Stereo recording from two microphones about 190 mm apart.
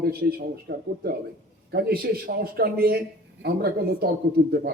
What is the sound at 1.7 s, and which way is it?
A man's voice, 50° right (ahead or behind).